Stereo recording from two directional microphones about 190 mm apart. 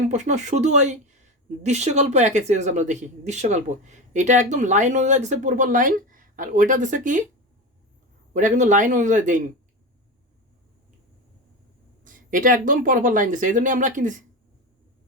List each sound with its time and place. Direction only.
0.1 s speech: 35° right (ahead or behind)
8.3 s speech: 40° right (ahead or behind)
12.0 s speech: 45° right (ahead or behind)